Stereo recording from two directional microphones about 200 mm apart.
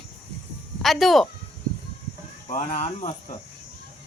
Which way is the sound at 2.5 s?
35° left (ahead or behind).